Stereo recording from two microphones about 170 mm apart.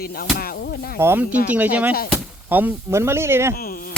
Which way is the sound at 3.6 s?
60° left (ahead or behind).